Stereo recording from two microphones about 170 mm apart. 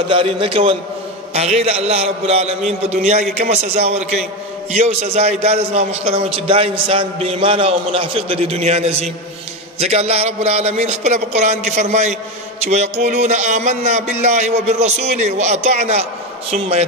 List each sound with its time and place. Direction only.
0.1 s a man's voice: 30° right (ahead or behind)